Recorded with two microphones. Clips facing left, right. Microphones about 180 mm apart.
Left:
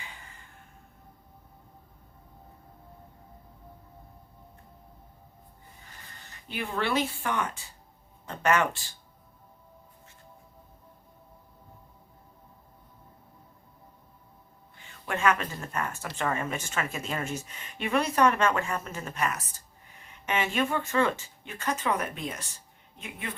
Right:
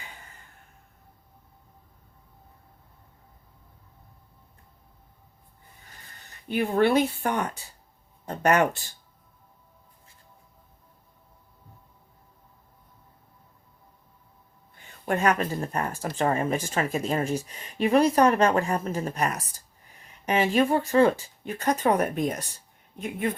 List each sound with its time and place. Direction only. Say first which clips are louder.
6.5 s speech: right 8 dB; 45° right (ahead or behind)
14.8 s speech: right 3 dB; 40° right (ahead or behind)